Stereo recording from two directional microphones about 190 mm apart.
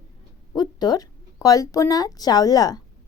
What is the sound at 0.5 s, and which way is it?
A woman's voice, 20° left (ahead or behind).